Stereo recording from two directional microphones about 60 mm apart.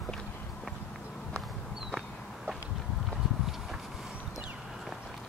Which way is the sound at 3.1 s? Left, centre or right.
Centre.